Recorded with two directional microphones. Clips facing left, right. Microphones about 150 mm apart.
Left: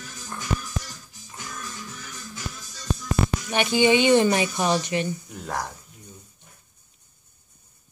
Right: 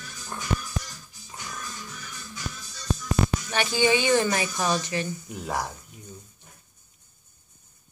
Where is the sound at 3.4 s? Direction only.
20° left (ahead or behind).